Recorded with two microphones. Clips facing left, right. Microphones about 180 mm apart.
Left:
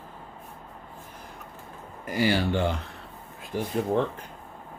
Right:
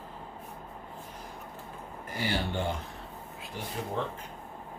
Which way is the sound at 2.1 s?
90° left.